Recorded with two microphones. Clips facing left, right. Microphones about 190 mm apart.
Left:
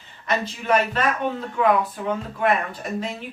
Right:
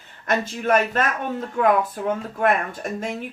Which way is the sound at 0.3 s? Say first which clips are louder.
Right 1 dB; 50° right (ahead or behind).